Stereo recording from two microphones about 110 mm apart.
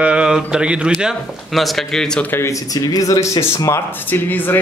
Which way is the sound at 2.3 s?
25° left (ahead or behind).